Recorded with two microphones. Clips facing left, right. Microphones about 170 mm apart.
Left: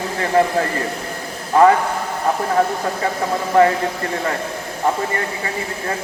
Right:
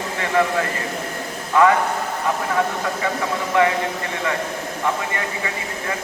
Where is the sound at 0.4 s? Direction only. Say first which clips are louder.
Left 3 dB; 35° left (ahead or behind).